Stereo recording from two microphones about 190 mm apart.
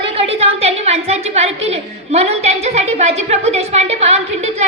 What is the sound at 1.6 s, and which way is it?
A woman's voice, 35° right (ahead or behind).